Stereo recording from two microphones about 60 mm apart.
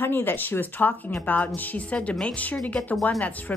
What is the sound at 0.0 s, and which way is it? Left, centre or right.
Speech, left.